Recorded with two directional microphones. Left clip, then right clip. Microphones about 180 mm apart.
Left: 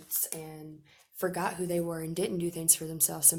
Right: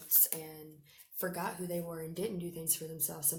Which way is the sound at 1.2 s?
55° left (ahead or behind).